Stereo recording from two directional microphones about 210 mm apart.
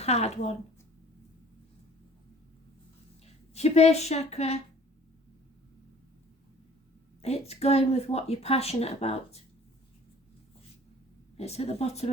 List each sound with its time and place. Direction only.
0.0 s a woman's voice: 30° left (ahead or behind)
3.5 s a woman's voice: 30° left (ahead or behind)
7.2 s speech: 30° left (ahead or behind)
11.3 s speech: 30° left (ahead or behind)